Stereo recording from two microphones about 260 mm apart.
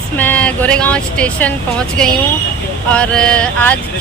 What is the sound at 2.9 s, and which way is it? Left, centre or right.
Speech, centre.